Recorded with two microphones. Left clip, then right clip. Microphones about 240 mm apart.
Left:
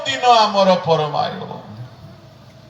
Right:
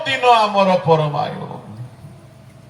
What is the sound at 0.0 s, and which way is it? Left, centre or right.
A man's voice, left.